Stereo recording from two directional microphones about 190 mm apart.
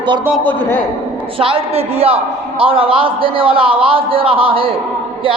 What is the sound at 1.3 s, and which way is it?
A man's voice, 30° right (ahead or behind).